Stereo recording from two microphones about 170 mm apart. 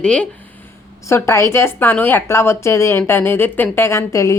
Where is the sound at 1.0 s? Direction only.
15° left (ahead or behind).